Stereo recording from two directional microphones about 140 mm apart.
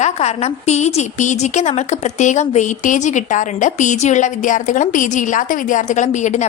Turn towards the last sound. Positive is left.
turn(degrees=60)  # may be behind; listen again after turning